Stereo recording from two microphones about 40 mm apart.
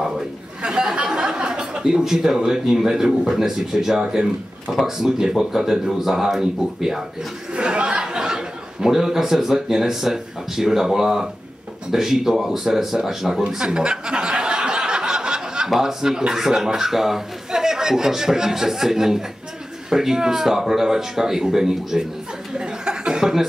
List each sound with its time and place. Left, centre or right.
0.6 s a man's voice: centre
7.5 s a sound: right
8.0 s a man's voice: centre
13.6 s a sound: right
15.8 s a man's voice: centre
22.5 s chuckle: centre